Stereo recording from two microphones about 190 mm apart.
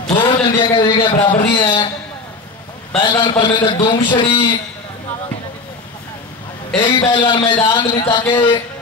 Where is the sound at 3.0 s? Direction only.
25° left (ahead or behind).